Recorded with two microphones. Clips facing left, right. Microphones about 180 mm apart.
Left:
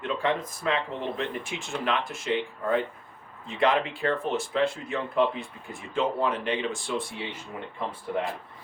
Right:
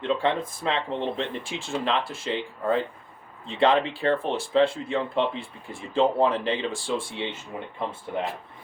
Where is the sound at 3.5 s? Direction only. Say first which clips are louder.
Right 3 dB; 30° right (ahead or behind).